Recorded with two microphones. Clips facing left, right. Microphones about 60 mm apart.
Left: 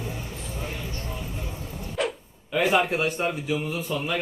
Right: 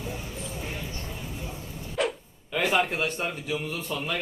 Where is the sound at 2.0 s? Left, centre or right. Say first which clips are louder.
Even; centre.